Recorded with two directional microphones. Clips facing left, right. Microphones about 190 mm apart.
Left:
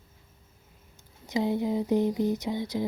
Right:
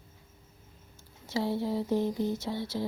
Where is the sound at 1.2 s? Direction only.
15° left (ahead or behind).